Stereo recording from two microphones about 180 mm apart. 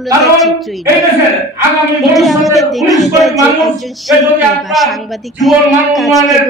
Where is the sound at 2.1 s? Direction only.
Centre (ahead or behind).